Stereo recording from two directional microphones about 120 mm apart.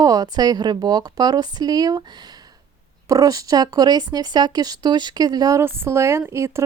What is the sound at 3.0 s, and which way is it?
Speech, 30° right (ahead or behind).